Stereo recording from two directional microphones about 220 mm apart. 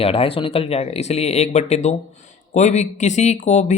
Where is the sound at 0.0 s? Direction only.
25° left (ahead or behind).